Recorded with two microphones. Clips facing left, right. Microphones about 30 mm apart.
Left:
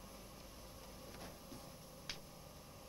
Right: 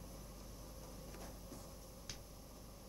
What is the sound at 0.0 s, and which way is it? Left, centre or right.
Vehicle, left.